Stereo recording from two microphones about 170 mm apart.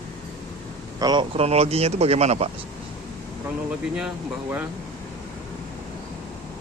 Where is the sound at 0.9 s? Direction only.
25° right (ahead or behind).